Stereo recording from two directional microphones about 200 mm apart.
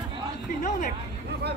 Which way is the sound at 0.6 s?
40° left (ahead or behind).